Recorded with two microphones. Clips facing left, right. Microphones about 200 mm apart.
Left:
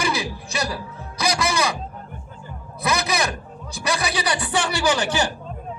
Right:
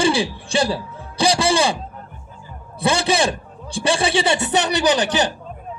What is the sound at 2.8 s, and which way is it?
A man's voice, 30° right (ahead or behind).